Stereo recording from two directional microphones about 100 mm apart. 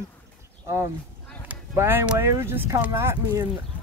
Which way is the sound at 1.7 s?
25° right (ahead or behind).